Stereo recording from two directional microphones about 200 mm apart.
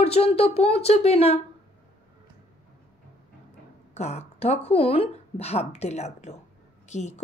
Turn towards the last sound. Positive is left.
turn(degrees=35)  # may be behind; listen again after turning